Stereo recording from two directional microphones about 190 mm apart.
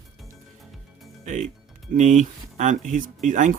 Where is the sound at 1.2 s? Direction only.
40° right (ahead or behind).